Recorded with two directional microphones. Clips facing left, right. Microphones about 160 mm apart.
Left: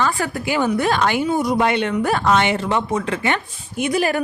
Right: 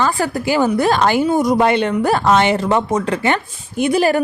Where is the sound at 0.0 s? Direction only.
35° right (ahead or behind).